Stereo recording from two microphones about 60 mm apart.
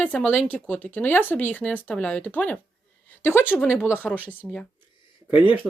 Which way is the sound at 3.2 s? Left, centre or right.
Left.